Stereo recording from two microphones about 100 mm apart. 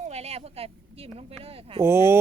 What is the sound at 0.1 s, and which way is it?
Speech, 90° right.